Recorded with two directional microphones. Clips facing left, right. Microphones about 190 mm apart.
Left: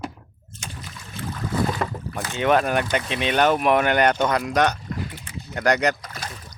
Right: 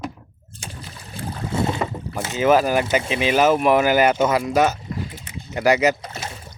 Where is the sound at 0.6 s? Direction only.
30° right (ahead or behind).